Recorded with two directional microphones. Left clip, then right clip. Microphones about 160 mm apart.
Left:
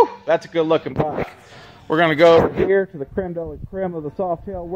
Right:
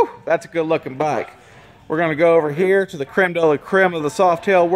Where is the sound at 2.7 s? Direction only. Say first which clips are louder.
Right 2 dB; 30° right (ahead or behind).